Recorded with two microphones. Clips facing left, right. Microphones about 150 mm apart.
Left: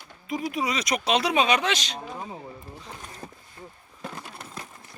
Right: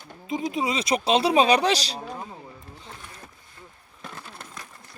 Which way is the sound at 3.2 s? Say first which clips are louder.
Left 6 dB; 35° left (ahead or behind).